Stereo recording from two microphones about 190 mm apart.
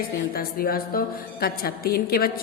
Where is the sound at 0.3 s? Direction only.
50° left (ahead or behind).